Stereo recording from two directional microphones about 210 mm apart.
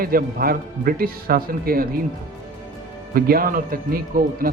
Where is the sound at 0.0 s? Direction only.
45° right (ahead or behind).